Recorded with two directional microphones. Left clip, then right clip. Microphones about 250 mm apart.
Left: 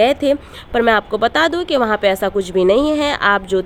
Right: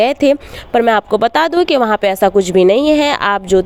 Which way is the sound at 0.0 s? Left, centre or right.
Right.